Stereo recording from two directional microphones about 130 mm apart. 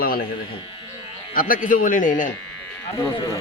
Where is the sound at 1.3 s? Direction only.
90° left.